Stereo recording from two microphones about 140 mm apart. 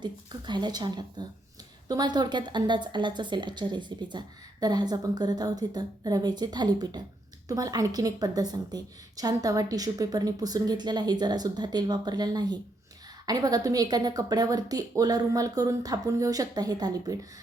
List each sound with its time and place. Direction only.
0.0 s a woman's voice: 30° right (ahead or behind)